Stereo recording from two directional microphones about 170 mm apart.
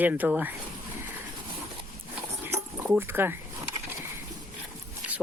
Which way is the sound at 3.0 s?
15° right (ahead or behind).